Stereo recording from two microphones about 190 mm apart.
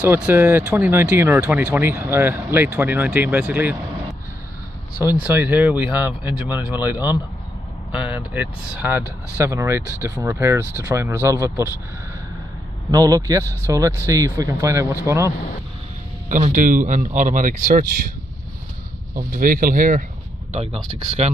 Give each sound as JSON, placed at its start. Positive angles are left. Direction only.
{"t": 0.0, "sound": "speech", "side_deg": -10}
{"t": 5.0, "sound": "speech", "side_deg": -10}
{"t": 12.9, "sound": "speech", "side_deg": -20}
{"t": 16.3, "sound": "speech", "side_deg": -40}
{"t": 19.1, "sound": "speech", "side_deg": -50}
{"t": 20.5, "sound": "speech", "side_deg": -35}